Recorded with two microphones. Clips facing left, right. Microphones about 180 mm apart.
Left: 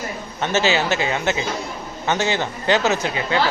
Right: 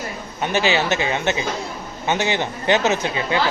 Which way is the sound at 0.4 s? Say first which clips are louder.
Even; 15° right (ahead or behind).